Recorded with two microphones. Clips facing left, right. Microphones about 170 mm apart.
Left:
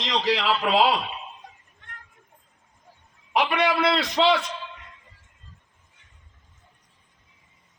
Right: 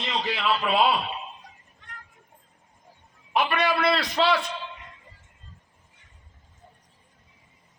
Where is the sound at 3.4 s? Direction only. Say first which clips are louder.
Left 1 dB; 20° left (ahead or behind).